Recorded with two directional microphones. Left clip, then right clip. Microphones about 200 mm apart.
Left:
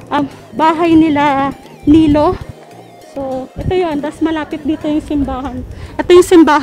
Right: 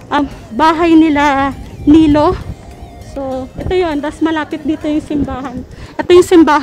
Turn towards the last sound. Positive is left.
turn(degrees=0)  # may be behind; listen again after turning